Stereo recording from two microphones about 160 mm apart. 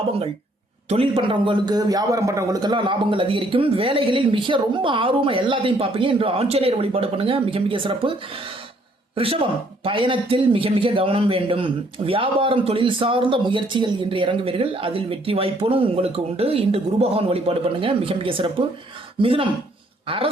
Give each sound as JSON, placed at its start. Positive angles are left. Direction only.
{"t": 0.9, "sound": "a man's voice", "side_deg": -35}
{"t": 9.1, "sound": "a man's voice", "side_deg": -35}